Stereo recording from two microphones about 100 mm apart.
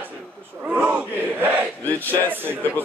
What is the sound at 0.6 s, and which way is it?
Speech, 15° right (ahead or behind).